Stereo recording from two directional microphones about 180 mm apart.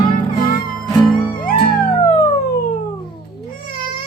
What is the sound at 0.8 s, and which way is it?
Music, centre (ahead or behind).